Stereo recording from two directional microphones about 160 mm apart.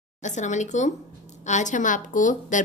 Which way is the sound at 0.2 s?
50° left (ahead or behind).